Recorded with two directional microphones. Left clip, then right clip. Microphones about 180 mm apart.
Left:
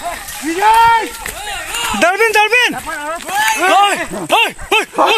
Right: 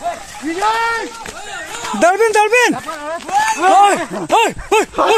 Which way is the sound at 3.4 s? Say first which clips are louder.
Left 1 dB; 60° right (ahead or behind).